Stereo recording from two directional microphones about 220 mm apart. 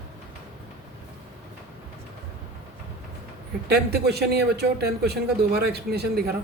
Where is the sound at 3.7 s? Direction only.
45° right (ahead or behind).